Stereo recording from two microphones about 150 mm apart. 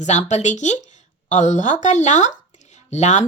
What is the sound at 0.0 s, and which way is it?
Speech, 50° left (ahead or behind).